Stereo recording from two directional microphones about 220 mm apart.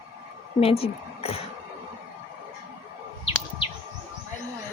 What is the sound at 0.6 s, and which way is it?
Speech, 25° left (ahead or behind).